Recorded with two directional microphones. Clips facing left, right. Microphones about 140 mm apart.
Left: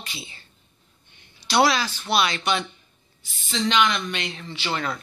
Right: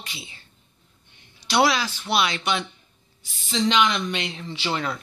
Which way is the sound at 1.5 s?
Centre (ahead or behind).